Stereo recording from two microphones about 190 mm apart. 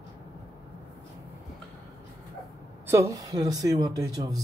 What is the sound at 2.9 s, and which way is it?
Speech, 15° right (ahead or behind).